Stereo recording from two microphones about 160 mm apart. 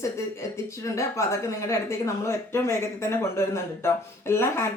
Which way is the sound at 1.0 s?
20° left (ahead or behind).